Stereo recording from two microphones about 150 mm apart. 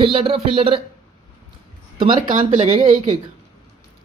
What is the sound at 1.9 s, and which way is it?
A woman's voice, 35° right (ahead or behind).